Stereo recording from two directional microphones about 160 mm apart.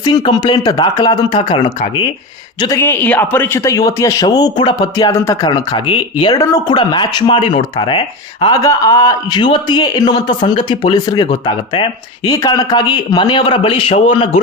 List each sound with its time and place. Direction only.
0.3 s speech: 25° left (ahead or behind)
2.6 s a man's voice: 20° left (ahead or behind); by 14.4 s 35° left (ahead or behind)